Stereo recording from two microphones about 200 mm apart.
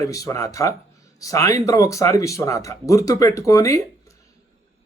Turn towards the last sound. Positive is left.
turn(degrees=15)  # may be behind; listen again after turning